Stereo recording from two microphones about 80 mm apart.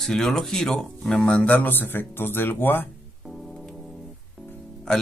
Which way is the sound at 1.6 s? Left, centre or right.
Left.